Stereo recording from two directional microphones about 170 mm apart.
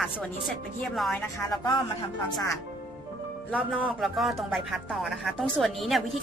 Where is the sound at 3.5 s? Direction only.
5° left (ahead or behind).